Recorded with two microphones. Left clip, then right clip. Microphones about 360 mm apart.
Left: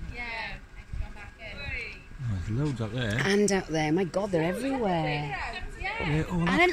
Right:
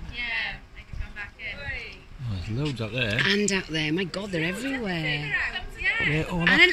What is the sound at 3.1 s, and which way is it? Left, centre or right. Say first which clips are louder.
Speech: even; centre.